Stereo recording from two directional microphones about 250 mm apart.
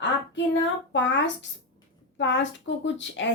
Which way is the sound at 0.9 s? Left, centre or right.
Left.